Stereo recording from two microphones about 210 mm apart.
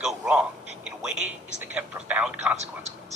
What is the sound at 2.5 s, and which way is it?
Speech, 30° right (ahead or behind).